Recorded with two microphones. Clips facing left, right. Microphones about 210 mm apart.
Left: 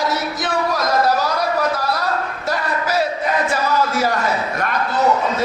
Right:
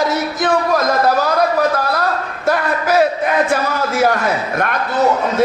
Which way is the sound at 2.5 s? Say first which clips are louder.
Right 6 dB; 55° right (ahead or behind).